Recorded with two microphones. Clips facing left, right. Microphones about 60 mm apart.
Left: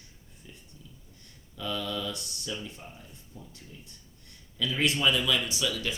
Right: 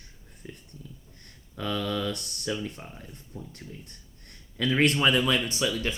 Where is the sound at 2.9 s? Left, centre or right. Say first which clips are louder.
Right 6 dB; right.